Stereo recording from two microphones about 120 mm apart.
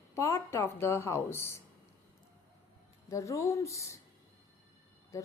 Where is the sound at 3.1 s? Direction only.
25° left (ahead or behind).